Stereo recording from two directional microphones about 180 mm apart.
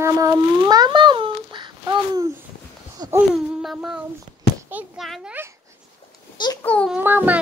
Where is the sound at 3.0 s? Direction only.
25° right (ahead or behind).